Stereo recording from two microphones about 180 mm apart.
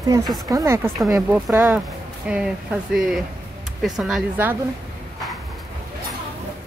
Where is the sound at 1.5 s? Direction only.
15° right (ahead or behind).